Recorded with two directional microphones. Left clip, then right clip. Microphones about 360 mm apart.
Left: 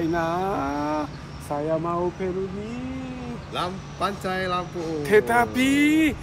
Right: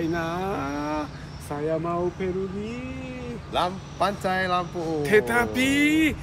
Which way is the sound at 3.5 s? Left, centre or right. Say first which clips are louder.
Right 4 dB; centre.